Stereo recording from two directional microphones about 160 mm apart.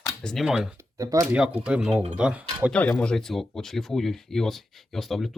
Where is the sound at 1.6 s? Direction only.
5° right (ahead or behind).